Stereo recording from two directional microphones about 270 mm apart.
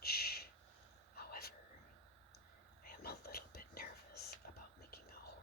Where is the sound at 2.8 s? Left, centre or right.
Left.